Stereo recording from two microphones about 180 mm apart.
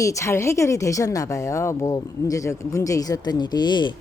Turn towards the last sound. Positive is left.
turn(degrees=25)  # may be behind; listen again after turning